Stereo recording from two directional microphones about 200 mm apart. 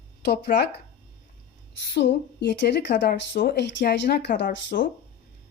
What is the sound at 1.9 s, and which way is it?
Speech, 60° left (ahead or behind).